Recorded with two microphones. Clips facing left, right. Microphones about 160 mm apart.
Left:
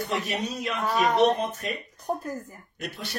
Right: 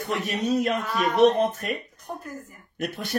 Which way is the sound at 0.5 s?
50° right (ahead or behind).